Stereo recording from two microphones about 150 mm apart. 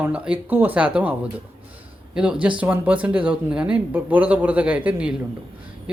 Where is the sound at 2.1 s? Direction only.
5° right (ahead or behind).